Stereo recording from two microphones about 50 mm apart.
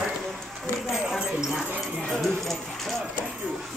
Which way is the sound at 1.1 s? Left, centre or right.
Centre.